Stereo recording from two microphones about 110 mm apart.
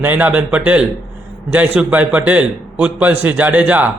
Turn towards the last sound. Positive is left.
turn(degrees=-15)  # may be behind; listen again after turning